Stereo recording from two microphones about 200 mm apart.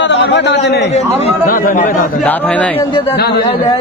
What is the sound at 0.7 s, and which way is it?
Speech, 60° left (ahead or behind).